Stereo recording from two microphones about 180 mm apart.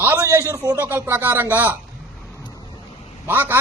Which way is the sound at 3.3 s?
10° right (ahead or behind).